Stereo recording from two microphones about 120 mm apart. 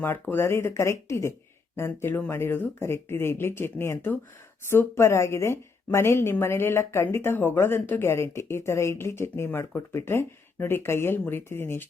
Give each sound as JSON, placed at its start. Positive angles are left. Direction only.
{"t": 0.0, "sound": "speech", "side_deg": 15}